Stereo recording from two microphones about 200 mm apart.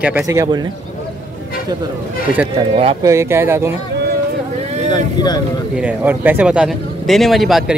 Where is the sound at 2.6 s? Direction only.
30° right (ahead or behind).